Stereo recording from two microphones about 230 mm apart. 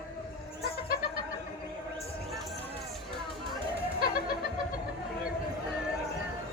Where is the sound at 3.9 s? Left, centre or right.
Left.